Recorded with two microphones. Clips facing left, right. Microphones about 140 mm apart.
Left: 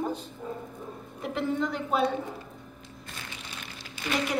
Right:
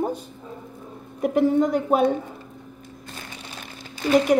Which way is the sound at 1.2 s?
45° right (ahead or behind).